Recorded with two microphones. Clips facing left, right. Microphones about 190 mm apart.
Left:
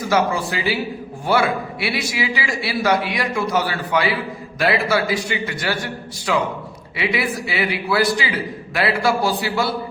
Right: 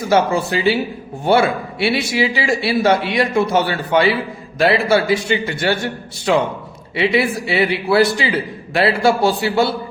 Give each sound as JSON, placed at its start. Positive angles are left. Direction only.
{"t": 0.0, "sound": "a man's voice", "side_deg": -25}